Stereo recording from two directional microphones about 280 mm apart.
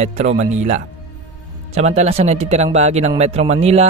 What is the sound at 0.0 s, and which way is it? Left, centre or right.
Speech, right.